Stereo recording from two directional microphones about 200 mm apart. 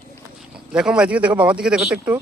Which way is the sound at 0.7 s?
5° right (ahead or behind).